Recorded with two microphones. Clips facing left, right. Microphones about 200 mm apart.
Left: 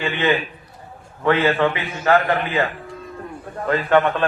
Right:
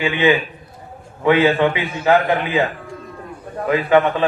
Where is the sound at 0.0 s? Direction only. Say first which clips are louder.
Right 4 dB; 10° right (ahead or behind).